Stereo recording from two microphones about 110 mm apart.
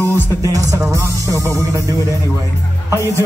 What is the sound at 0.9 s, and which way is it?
Music, 25° right (ahead or behind).